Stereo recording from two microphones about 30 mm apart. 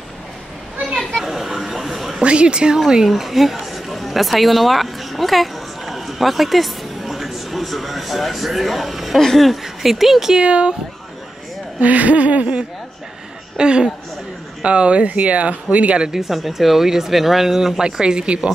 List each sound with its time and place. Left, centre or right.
0.9 s a sound: centre
2.2 s a woman's voice: right
3.1 s speech: centre
10.4 s a woman's voice: right
11.8 s speech: right
13.6 s a woman's voice: right
14.6 s speech: right
16.1 s speech: centre
18.0 s a woman's voice: right